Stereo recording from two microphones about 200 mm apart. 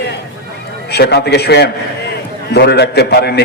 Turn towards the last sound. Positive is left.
turn(degrees=55)  # may be behind; listen again after turning